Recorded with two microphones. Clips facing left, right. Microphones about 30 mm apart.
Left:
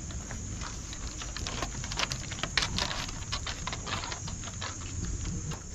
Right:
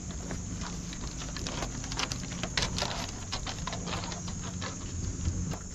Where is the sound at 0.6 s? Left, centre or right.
Centre.